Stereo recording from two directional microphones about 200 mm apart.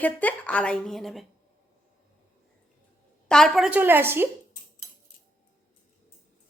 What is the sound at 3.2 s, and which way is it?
Speech, centre (ahead or behind).